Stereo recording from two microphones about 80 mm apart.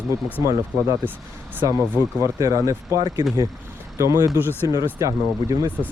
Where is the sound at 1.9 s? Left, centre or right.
Right.